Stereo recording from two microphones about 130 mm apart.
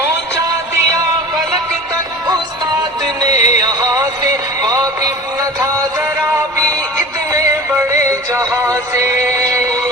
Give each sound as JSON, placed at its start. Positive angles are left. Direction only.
{"t": 3.3, "sound": "music", "side_deg": 60}
{"t": 3.6, "sound": "music", "side_deg": -30}
{"t": 6.2, "sound": "synthetic singing", "side_deg": -25}
{"t": 7.3, "sound": "music", "side_deg": -25}